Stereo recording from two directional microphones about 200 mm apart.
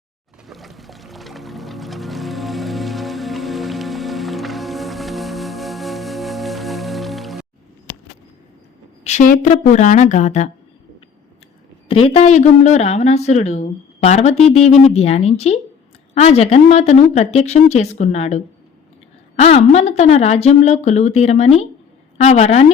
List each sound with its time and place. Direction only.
0.4 s music: centre (ahead or behind)
9.0 s speech: 40° left (ahead or behind)
11.9 s speech: 30° left (ahead or behind)